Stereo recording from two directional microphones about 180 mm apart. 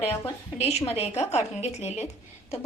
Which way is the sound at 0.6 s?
35° left (ahead or behind).